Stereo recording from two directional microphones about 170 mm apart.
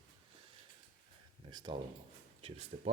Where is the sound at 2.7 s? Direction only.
45° right (ahead or behind).